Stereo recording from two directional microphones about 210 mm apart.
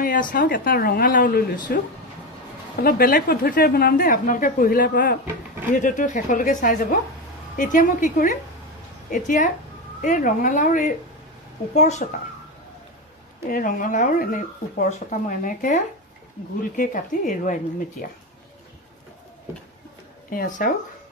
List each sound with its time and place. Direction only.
0.0 s a woman's voice: 40° left (ahead or behind)
2.8 s a woman's voice: 45° left (ahead or behind)
5.8 s speech: 40° left (ahead or behind)
13.5 s speech: 40° left (ahead or behind)
20.2 s speech: 40° left (ahead or behind)